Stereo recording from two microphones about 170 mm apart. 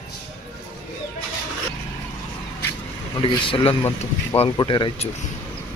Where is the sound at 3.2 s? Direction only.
35° left (ahead or behind).